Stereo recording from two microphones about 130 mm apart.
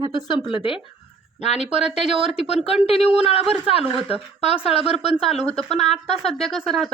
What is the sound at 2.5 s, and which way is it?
Speech, 50° left (ahead or behind).